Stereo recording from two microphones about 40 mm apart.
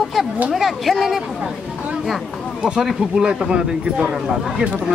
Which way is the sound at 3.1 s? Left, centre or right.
Centre.